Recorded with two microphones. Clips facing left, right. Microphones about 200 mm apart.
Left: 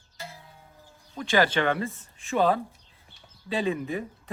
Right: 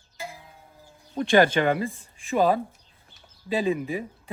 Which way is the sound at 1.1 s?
50° right (ahead or behind).